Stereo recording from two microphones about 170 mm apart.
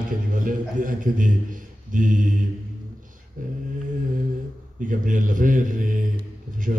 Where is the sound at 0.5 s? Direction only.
50° right (ahead or behind).